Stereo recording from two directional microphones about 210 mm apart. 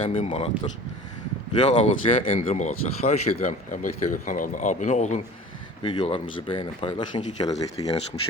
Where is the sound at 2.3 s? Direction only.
35° left (ahead or behind).